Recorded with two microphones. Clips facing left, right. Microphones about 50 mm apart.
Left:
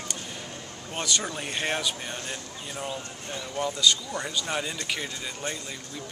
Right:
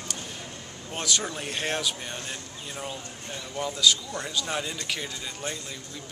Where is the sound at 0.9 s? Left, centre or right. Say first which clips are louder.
Even; centre.